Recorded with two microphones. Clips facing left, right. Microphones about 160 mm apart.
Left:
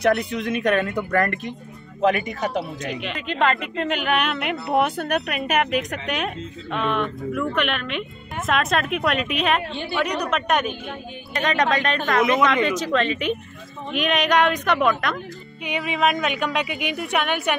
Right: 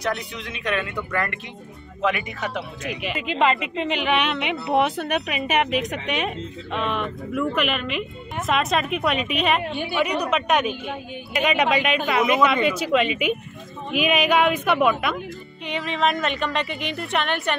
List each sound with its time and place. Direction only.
0.0 s speech: 55° left (ahead or behind)
2.8 s a woman's voice: 5° right (ahead or behind)
15.6 s speech: 10° left (ahead or behind)